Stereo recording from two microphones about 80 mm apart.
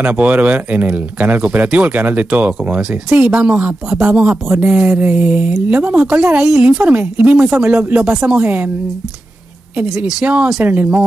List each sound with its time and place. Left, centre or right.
0.0 s a woman's voice: right
8.4 s speech: right
9.8 s a woman's voice: centre
10.2 s a woman's voice: centre